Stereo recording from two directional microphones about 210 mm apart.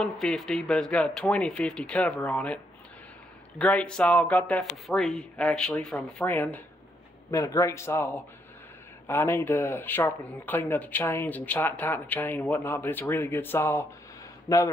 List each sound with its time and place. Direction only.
0.0 s speech: centre (ahead or behind)